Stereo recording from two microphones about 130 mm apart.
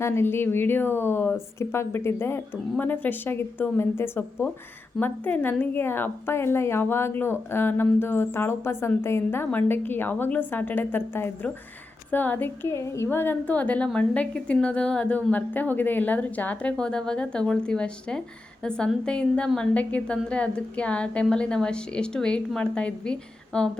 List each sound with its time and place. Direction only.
0.0 s a woman's voice: 20° left (ahead or behind)